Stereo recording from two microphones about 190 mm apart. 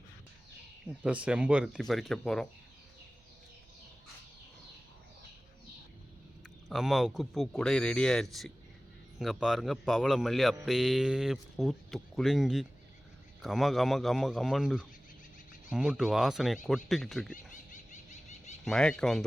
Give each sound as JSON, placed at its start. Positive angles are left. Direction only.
{"t": 1.0, "sound": "a man's voice", "side_deg": -5}
{"t": 6.7, "sound": "a man's voice", "side_deg": 0}
{"t": 17.3, "sound": "a sound", "side_deg": 40}
{"t": 18.6, "sound": "a man's voice", "side_deg": 5}